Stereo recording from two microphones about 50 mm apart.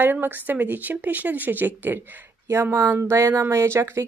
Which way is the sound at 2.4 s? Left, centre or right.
Right.